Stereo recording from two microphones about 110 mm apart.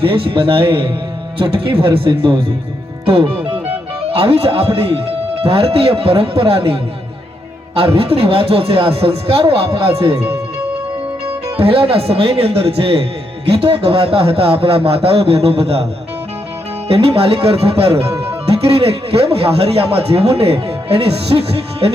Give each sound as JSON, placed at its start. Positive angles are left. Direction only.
{"t": 0.0, "sound": "speech", "side_deg": -55}
{"t": 4.1, "sound": "a man's voice", "side_deg": -60}
{"t": 7.8, "sound": "a man's voice", "side_deg": -60}
{"t": 11.5, "sound": "a man's voice", "side_deg": -60}
{"t": 16.9, "sound": "a man's voice", "side_deg": -60}